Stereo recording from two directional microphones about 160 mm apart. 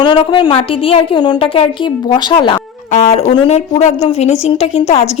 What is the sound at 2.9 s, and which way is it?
A woman's voice, 45° left (ahead or behind).